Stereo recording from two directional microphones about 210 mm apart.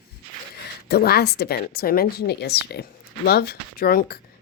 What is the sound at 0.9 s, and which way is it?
A woman's voice, 50° left (ahead or behind).